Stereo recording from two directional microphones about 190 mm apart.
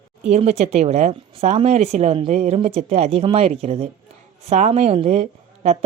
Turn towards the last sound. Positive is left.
turn(degrees=-35)  # may be behind; listen again after turning